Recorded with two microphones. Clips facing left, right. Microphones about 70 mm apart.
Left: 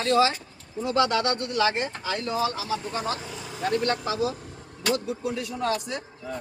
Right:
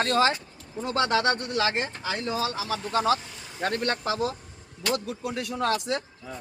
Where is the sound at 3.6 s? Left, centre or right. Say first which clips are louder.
Left 2 dB; right.